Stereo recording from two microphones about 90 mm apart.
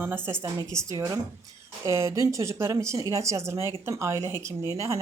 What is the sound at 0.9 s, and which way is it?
Speech, 50° right (ahead or behind).